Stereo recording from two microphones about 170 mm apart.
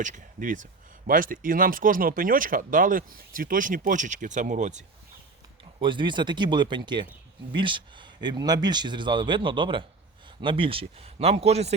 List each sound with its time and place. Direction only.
0.0 s speech: 50° right (ahead or behind)
5.8 s speech: 30° right (ahead or behind)